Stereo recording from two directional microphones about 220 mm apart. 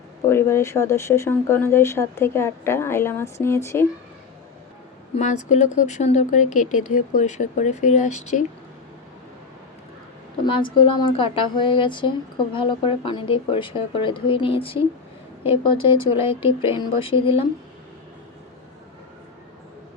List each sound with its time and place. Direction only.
0.3 s speech: 10° left (ahead or behind)
5.1 s speech: 30° left (ahead or behind)
10.4 s speech: 20° left (ahead or behind)